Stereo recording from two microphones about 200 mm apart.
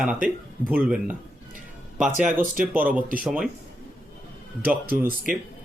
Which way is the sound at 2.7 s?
10° right (ahead or behind).